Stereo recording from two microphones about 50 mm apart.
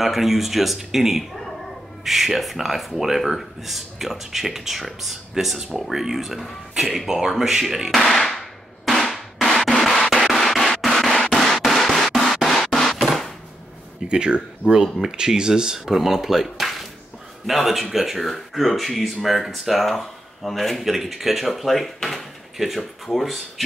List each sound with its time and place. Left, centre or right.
0.0 s speech: centre
7.9 s music: centre
14.0 s speech: centre